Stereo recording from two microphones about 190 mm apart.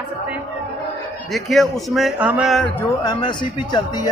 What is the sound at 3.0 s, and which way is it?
Speech, 25° left (ahead or behind).